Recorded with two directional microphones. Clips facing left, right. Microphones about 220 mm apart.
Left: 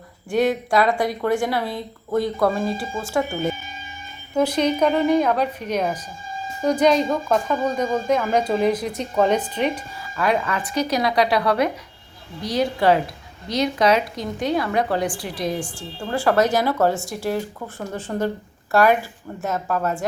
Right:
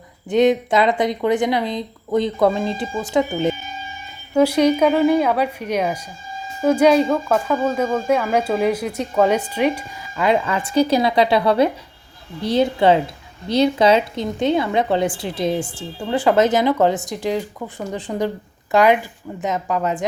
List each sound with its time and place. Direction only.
0.3 s speech: 20° right (ahead or behind)
10.2 s speech: 25° right (ahead or behind)